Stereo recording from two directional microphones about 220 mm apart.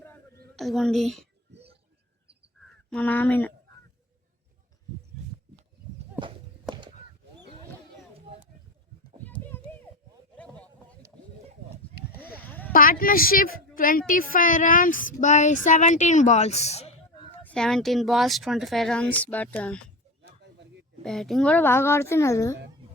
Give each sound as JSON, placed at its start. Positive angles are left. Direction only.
{"t": 0.5, "sound": "speech", "side_deg": 0}
{"t": 2.9, "sound": "speech", "side_deg": 5}
{"t": 9.4, "sound": "children playing", "side_deg": 10}
{"t": 12.4, "sound": "a sound", "side_deg": 10}
{"t": 12.7, "sound": "speech", "side_deg": 40}
{"t": 17.4, "sound": "speech", "side_deg": 5}
{"t": 21.0, "sound": "speech", "side_deg": 0}